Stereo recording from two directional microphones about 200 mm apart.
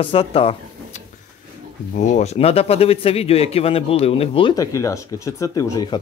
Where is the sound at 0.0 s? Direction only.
30° left (ahead or behind).